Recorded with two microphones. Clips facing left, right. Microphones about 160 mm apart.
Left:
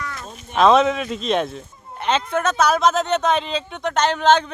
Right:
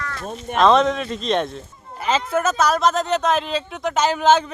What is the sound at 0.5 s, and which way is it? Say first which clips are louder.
Speech: left 1 dB; 5° left (ahead or behind).